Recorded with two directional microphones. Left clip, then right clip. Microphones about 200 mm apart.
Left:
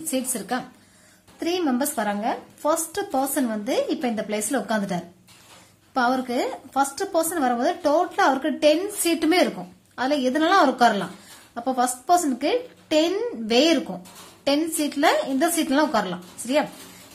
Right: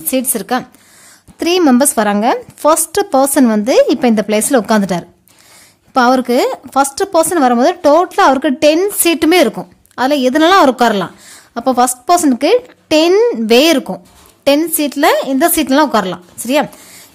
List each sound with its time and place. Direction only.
0.1 s speech: 45° right (ahead or behind)